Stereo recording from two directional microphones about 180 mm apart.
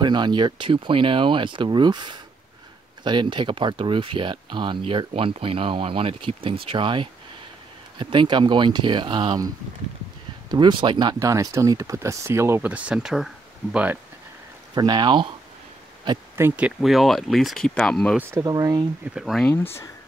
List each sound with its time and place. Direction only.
0.0 s speech: 25° right (ahead or behind)
10.5 s speech: 25° right (ahead or behind); by 13.9 s 5° right (ahead or behind)
14.8 s speech: 25° right (ahead or behind)
16.3 s speech: 10° right (ahead or behind)
18.3 s speech: 20° right (ahead or behind)
19.1 s speech: centre (ahead or behind)